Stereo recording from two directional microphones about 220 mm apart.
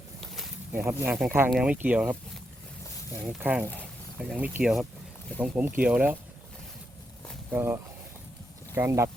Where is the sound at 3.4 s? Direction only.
10° right (ahead or behind).